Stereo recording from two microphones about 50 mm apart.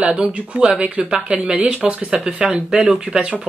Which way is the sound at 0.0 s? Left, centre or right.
Right.